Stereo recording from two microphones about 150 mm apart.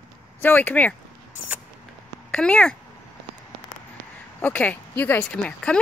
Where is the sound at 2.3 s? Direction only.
5° left (ahead or behind).